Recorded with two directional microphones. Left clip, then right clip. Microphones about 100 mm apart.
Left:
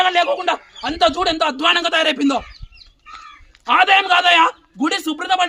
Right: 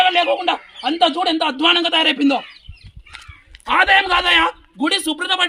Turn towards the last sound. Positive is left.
turn(degrees=-10)  # may be behind; listen again after turning